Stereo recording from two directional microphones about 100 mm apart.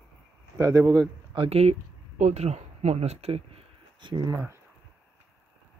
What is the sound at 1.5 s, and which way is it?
Speech, 90° right.